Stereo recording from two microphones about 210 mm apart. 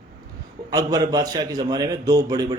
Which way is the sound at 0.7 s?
15° right (ahead or behind).